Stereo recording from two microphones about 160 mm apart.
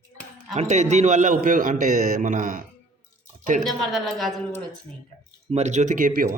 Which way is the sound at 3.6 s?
Centre (ahead or behind).